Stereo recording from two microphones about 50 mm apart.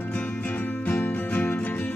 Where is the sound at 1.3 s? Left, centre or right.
Left.